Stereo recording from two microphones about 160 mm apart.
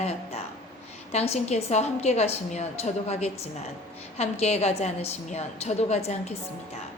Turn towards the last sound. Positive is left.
turn(degrees=40)  # may be behind; listen again after turning